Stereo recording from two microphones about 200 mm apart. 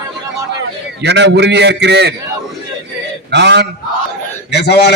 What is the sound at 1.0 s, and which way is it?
A man's voice, 60° right (ahead or behind).